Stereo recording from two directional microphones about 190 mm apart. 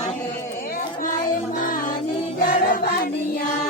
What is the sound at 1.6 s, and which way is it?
Music, 45° left (ahead or behind).